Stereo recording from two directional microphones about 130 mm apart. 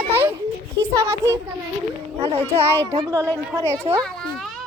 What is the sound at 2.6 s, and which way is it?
Speech, 20° right (ahead or behind).